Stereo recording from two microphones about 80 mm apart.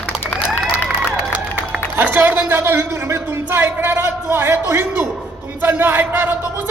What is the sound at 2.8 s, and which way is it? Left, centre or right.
A man's voice, right.